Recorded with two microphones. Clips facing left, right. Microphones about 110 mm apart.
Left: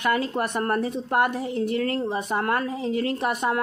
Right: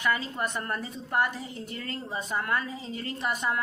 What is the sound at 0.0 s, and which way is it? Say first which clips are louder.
A woman's voice: left 5 dB; 60° left (ahead or behind).